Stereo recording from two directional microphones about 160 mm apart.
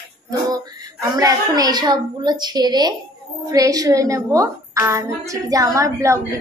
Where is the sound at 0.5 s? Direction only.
20° right (ahead or behind).